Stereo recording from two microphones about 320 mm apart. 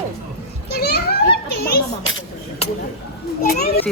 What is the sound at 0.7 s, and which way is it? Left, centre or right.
Children playing, left.